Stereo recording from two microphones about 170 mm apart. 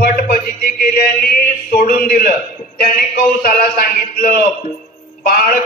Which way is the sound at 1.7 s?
60° left (ahead or behind).